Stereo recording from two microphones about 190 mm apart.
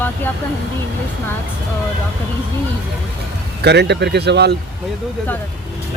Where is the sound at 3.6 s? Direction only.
60° right (ahead or behind).